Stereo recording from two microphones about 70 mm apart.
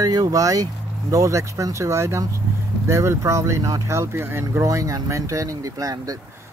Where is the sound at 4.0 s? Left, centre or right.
Right.